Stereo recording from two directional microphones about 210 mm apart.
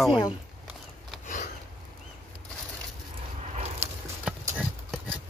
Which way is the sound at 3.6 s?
30° right (ahead or behind).